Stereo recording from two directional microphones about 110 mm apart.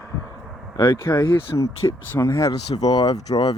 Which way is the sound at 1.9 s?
25° left (ahead or behind).